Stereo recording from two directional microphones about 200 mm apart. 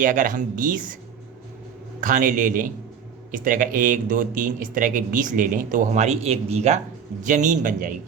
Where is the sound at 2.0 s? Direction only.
40° right (ahead or behind).